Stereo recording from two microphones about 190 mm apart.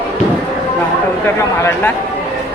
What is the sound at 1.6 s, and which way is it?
Speech, 10° left (ahead or behind).